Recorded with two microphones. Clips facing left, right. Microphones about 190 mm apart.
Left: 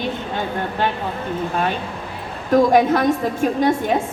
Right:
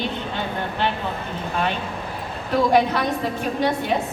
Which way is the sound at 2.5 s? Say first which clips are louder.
Left 4 dB; 45° left (ahead or behind).